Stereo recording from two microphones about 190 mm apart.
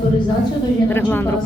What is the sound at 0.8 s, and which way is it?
Speech, 10° left (ahead or behind).